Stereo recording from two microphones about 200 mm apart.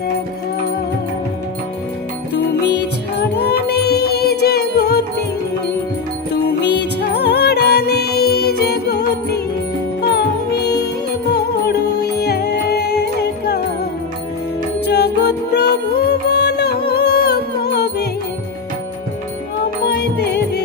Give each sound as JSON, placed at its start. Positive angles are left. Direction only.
{"t": 2.3, "sound": "music", "side_deg": 55}
{"t": 6.3, "sound": "music", "side_deg": 60}
{"t": 14.8, "sound": "music", "side_deg": 55}
{"t": 19.8, "sound": "music", "side_deg": 55}